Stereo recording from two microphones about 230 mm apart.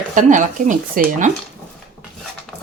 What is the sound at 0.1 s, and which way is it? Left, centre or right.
Speech, right.